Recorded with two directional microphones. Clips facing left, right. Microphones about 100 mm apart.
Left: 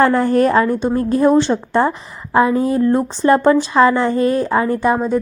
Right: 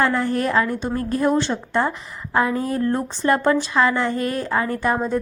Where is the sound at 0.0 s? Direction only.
45° left (ahead or behind); by 4.9 s 20° left (ahead or behind).